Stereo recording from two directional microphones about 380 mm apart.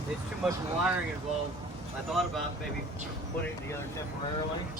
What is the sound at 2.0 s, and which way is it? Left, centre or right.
Speech, centre.